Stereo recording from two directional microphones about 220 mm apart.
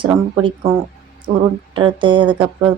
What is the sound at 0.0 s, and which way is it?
Speech, 20° right (ahead or behind).